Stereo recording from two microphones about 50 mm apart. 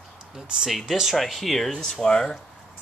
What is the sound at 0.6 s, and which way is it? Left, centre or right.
Speech, centre.